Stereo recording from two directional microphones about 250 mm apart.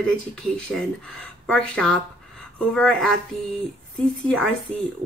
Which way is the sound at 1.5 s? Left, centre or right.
Centre.